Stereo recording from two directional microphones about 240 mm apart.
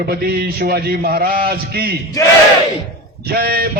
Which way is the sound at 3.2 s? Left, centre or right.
Right.